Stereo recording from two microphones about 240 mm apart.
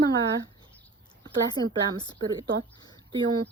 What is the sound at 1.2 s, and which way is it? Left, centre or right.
Speech, centre.